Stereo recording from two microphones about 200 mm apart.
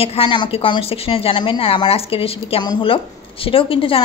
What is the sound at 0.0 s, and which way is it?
A woman's voice, 30° left (ahead or behind).